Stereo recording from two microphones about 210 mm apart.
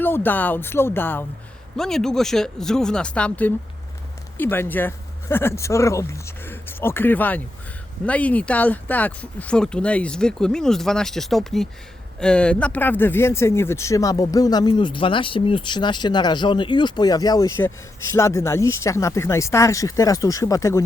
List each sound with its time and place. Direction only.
0.0 s speech: 10° left (ahead or behind)